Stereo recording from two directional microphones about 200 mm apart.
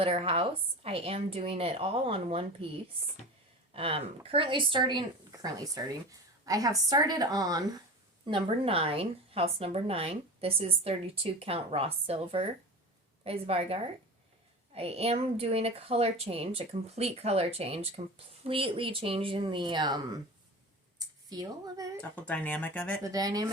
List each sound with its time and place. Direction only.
0.0 s a woman's voice: 30° right (ahead or behind)
3.7 s a woman's voice: 30° right (ahead or behind)
21.2 s a woman's voice: 20° right (ahead or behind)
22.1 s speech: 10° left (ahead or behind)
23.0 s speech: 20° right (ahead or behind)